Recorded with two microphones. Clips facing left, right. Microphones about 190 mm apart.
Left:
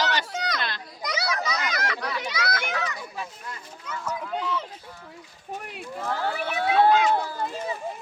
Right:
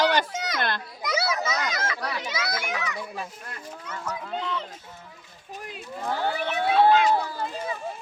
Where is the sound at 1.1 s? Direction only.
25° right (ahead or behind).